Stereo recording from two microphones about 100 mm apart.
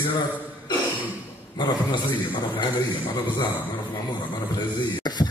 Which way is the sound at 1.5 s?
50° left (ahead or behind).